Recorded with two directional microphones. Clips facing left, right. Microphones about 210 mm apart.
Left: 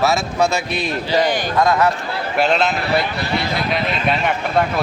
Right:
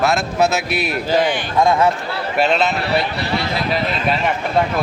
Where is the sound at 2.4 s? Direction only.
Centre (ahead or behind).